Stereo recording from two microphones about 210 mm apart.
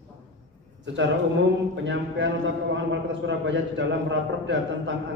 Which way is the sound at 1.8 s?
60° right (ahead or behind).